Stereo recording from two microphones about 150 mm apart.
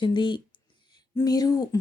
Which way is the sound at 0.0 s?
30° left (ahead or behind).